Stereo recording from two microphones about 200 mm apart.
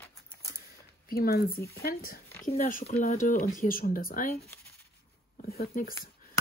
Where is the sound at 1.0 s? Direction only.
50° left (ahead or behind).